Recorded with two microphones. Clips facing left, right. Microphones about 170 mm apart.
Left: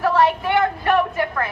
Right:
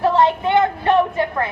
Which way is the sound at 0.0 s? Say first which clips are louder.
Right 2 dB; 20° right (ahead or behind).